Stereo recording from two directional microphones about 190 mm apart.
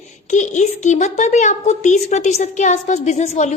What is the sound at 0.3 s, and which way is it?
A woman's voice, 40° left (ahead or behind).